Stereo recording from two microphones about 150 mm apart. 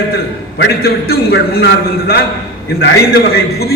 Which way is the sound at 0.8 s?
90° left.